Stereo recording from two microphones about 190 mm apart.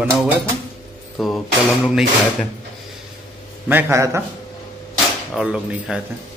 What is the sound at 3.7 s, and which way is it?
Speech, 15° right (ahead or behind).